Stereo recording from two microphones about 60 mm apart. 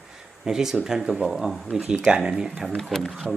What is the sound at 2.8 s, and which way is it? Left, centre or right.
Speech, centre.